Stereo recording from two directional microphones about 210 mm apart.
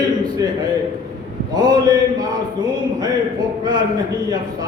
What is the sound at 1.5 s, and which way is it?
Speech, 20° right (ahead or behind).